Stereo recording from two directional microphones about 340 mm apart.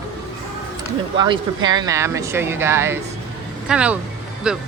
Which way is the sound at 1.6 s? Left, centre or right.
Centre.